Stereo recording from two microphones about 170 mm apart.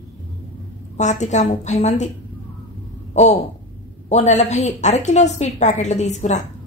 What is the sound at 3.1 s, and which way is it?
A woman's voice, 40° left (ahead or behind).